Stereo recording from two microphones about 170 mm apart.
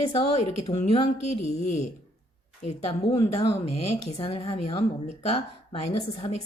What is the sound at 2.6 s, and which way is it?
Speech, 35° left (ahead or behind).